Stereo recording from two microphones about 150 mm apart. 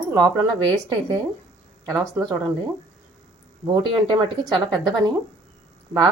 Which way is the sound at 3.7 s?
30° right (ahead or behind).